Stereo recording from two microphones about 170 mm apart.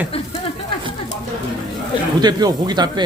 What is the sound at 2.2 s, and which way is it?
Speech, 25° right (ahead or behind).